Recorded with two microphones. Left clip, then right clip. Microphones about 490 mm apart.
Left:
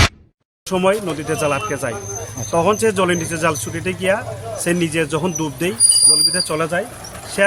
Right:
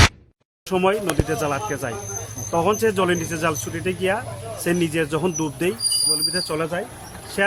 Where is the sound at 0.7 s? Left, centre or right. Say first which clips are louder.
Left 3 dB; right.